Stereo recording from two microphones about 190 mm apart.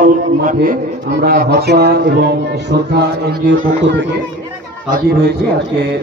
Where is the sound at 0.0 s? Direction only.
45° right (ahead or behind).